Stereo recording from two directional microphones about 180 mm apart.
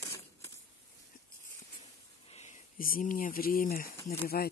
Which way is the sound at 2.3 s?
40° left (ahead or behind).